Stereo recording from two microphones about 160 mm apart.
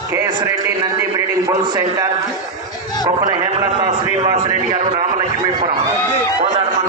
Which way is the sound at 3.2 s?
30° right (ahead or behind).